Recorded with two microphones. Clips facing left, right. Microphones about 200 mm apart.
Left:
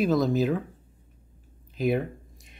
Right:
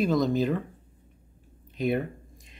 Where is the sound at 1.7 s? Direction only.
Centre (ahead or behind).